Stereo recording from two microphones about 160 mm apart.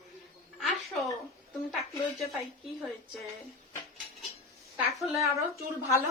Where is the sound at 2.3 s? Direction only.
Centre (ahead or behind).